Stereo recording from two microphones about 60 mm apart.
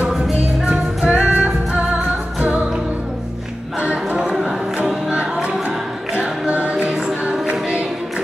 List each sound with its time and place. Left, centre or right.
0.7 s music: right
3.8 s a sound: centre
6.1 s music: right